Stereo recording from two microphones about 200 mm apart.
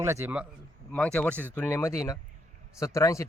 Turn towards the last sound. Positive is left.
turn(degrees=15)  # may be behind; listen again after turning